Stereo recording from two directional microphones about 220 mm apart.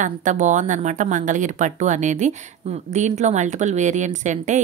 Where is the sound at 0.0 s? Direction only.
35° right (ahead or behind).